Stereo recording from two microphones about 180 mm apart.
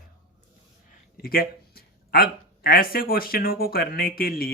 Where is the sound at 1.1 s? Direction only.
55° left (ahead or behind).